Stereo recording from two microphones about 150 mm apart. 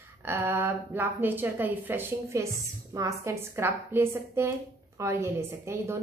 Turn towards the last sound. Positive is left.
turn(degrees=-20)  # may be behind; listen again after turning